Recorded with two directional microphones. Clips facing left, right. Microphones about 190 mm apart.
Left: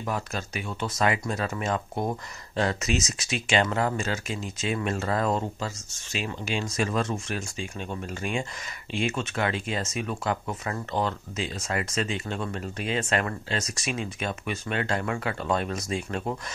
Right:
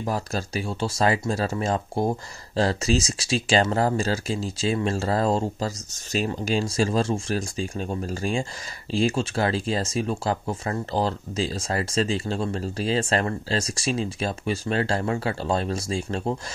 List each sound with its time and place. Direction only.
0.0 s speech: 35° right (ahead or behind)